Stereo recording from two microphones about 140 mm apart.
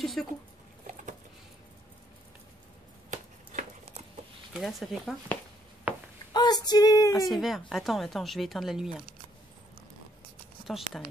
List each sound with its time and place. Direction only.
0.0 s a woman's voice: centre (ahead or behind)
3.1 s chopping: 55° right (ahead or behind)
4.6 s a woman's voice: centre (ahead or behind)
6.3 s female singing: 30° left (ahead or behind)
7.2 s a woman's voice: centre (ahead or behind)